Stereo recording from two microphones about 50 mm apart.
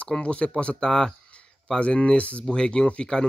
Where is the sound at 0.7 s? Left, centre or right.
Centre.